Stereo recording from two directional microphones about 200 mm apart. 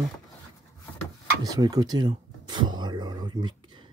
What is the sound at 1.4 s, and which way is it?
Speech, 20° right (ahead or behind).